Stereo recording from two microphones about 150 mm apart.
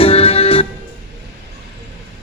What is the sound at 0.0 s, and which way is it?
Music, 40° left (ahead or behind).